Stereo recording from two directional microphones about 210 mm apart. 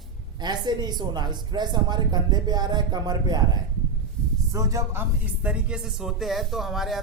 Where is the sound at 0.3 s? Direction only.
20° right (ahead or behind).